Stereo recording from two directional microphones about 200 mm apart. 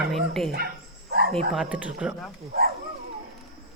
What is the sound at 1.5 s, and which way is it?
Speech, 5° right (ahead or behind).